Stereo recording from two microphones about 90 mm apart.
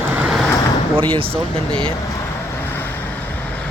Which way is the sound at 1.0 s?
70° right (ahead or behind).